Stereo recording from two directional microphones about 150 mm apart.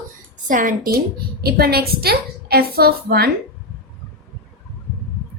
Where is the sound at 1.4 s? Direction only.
90° right.